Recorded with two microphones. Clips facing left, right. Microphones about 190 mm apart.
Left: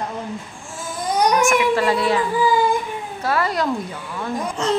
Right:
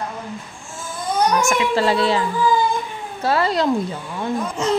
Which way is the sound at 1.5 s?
30° right (ahead or behind).